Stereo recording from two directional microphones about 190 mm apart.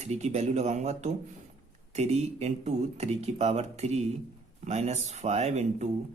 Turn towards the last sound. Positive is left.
turn(degrees=-35)  # may be behind; listen again after turning